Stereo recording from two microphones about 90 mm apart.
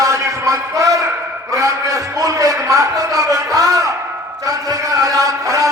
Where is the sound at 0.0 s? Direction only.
35° right (ahead or behind).